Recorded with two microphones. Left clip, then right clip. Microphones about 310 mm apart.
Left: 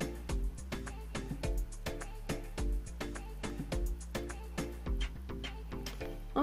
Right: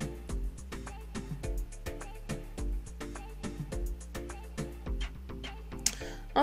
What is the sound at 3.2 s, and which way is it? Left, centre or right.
Music, centre.